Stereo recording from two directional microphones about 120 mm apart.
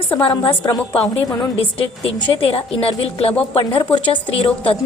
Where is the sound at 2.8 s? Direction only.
55° left (ahead or behind).